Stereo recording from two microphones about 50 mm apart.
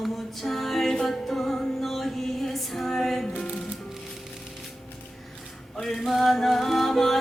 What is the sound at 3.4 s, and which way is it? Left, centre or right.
Music, centre.